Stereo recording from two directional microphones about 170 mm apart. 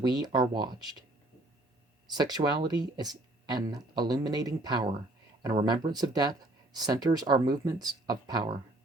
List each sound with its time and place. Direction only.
0.0 s speech: 25° right (ahead or behind)
2.1 s speech: 25° right (ahead or behind)